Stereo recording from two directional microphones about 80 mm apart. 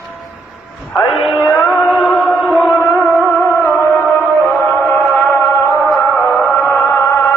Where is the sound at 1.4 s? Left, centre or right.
Left.